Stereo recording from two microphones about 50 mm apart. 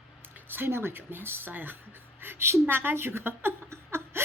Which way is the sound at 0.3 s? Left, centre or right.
Right.